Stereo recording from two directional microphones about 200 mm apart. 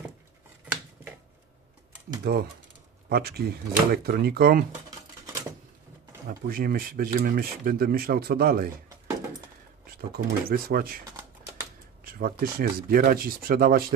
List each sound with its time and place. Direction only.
2.3 s speech: 55° right (ahead or behind)
6.4 s speech: 50° right (ahead or behind)
10.1 s speech: 50° right (ahead or behind)
12.0 s speech: 45° right (ahead or behind)